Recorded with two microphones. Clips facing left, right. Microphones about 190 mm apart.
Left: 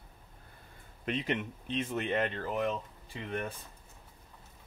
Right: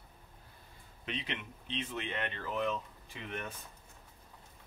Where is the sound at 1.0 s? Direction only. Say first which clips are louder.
Left 8 dB; 50° left (ahead or behind).